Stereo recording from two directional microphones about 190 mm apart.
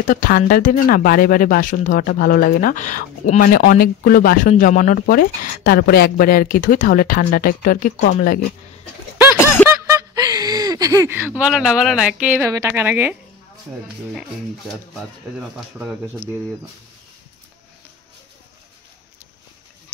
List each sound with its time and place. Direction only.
0.0 s speech: 45° left (ahead or behind)
9.4 s music: 10° left (ahead or behind)
9.7 s speech: 20° right (ahead or behind)